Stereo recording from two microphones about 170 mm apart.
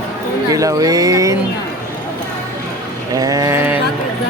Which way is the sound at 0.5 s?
20° right (ahead or behind).